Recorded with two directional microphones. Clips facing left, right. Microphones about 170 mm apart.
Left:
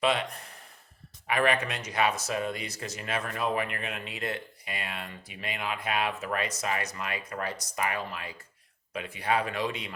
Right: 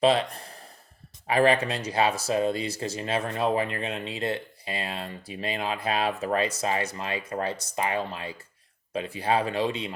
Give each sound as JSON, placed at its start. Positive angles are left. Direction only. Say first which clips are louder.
{"t": 0.0, "sound": "speech", "louder": "right 6 dB", "side_deg": -35}